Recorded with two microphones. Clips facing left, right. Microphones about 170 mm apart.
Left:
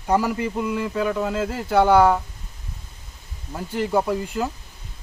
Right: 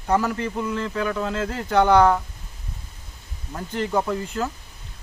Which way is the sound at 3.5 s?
10° left (ahead or behind).